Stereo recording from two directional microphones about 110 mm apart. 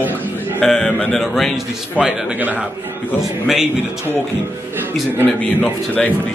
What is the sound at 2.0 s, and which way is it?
Speech, 10° right (ahead or behind).